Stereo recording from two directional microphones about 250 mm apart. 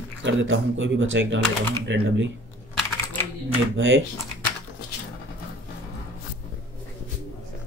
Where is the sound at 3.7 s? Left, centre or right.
Right.